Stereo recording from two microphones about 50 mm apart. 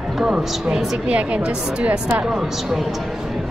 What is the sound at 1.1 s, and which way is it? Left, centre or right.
Speech, right.